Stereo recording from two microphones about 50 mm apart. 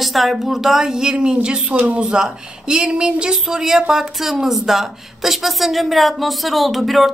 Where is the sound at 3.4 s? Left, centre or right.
Centre.